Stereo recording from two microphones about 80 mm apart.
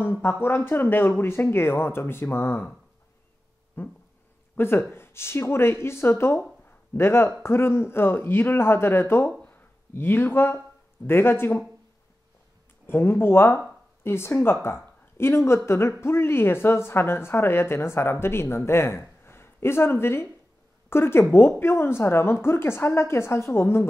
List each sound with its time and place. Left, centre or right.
0.2 s speech: left
3.8 s speech: left
9.4 s a sound: left
11.1 s speech: left
12.8 s a woman's voice: left